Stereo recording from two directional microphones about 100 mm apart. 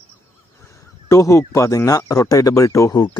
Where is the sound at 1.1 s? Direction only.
30° left (ahead or behind).